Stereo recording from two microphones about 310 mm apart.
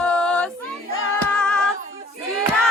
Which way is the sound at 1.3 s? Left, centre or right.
Centre.